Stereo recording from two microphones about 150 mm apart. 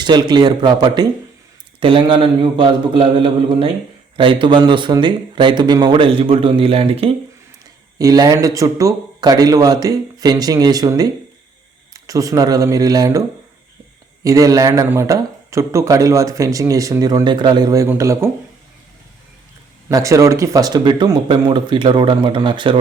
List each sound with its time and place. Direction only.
0.0 s speech: 30° right (ahead or behind)
7.9 s speech: 25° right (ahead or behind)
14.3 s speech: 25° right (ahead or behind)
19.9 s speech: 20° right (ahead or behind)